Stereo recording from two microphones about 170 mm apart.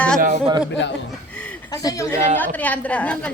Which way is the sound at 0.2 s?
50° right (ahead or behind).